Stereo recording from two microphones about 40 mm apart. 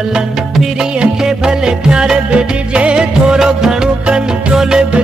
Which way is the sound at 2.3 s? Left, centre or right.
Right.